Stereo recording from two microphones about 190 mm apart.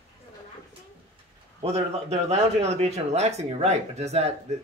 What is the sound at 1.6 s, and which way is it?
Speech, 35° right (ahead or behind).